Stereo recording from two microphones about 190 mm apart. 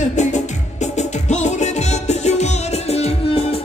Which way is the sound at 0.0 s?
40° left (ahead or behind).